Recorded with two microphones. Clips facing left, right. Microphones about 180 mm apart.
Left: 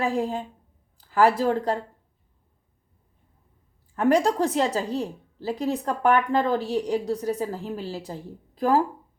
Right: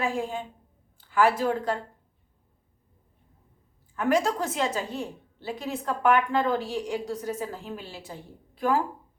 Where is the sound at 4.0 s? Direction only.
35° left (ahead or behind).